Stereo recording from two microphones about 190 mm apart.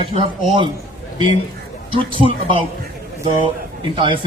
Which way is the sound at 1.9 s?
25° right (ahead or behind).